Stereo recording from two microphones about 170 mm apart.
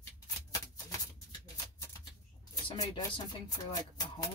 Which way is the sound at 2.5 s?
20° left (ahead or behind).